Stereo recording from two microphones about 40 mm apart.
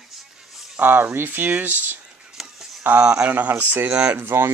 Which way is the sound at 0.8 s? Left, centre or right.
Right.